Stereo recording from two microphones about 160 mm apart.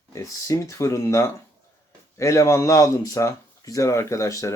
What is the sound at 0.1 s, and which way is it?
Speech, 20° left (ahead or behind).